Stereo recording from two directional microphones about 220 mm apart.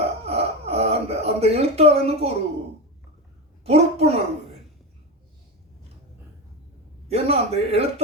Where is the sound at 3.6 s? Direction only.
30° right (ahead or behind).